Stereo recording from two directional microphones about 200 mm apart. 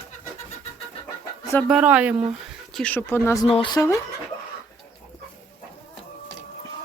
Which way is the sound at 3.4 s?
25° left (ahead or behind).